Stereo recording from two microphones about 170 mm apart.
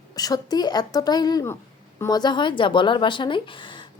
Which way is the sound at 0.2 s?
20° left (ahead or behind).